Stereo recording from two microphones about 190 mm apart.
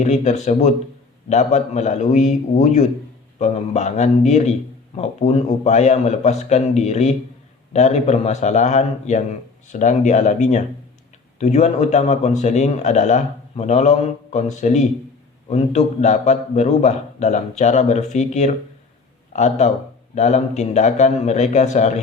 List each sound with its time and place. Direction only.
0.0 s a man's voice: 40° left (ahead or behind)